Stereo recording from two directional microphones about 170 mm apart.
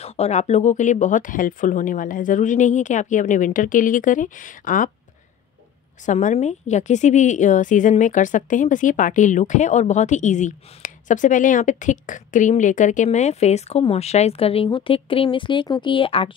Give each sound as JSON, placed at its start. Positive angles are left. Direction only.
{"t": 0.0, "sound": "a woman's voice", "side_deg": 40}
{"t": 6.0, "sound": "a woman's voice", "side_deg": 40}